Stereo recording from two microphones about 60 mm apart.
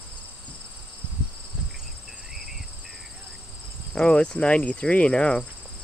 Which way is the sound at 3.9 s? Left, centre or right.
Centre.